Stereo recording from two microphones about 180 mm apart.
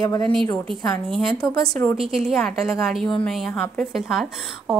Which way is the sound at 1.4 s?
20° left (ahead or behind).